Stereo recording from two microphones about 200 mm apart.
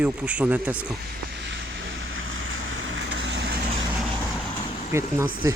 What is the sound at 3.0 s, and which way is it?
Vehicle, 65° right (ahead or behind).